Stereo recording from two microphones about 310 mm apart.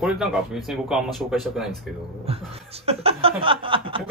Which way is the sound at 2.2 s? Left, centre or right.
Centre.